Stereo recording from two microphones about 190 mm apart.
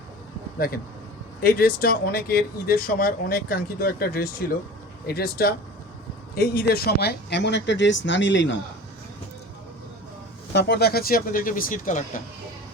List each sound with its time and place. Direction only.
1.4 s speech: 55° left (ahead or behind); by 8.5 s 75° left (ahead or behind)
10.5 s speech: 60° left (ahead or behind); by 12.2 s 45° left (ahead or behind)